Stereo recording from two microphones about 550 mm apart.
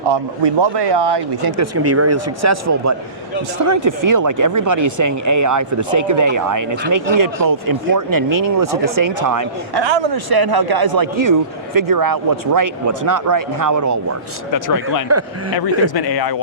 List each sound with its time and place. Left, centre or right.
0.1 s speech: right
1.5 s speech: right
9.8 s speech: right
14.5 s speech: left